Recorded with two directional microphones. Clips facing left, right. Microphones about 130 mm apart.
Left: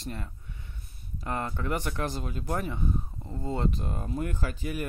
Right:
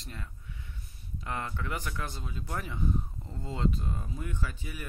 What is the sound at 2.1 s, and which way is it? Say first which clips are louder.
Speech: left 7 dB; 60° left (ahead or behind).